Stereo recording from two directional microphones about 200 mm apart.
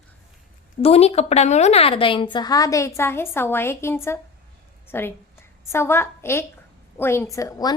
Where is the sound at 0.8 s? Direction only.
30° left (ahead or behind).